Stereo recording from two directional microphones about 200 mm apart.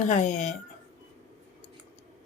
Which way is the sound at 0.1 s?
35° left (ahead or behind).